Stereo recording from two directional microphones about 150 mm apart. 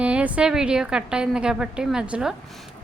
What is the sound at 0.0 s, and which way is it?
A woman's voice, 10° right (ahead or behind).